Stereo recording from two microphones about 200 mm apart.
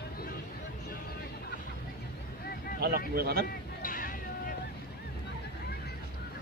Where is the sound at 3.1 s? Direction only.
50° right (ahead or behind).